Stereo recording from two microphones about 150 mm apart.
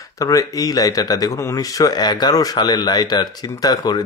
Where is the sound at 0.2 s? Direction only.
20° left (ahead or behind).